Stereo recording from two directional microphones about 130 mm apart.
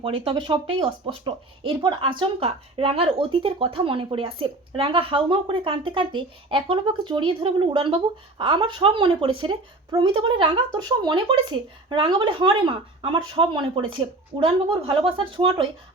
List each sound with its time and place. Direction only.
0.0 s speech: 40° right (ahead or behind)